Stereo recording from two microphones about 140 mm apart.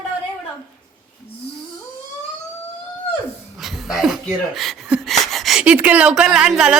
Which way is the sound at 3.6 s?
Centre (ahead or behind).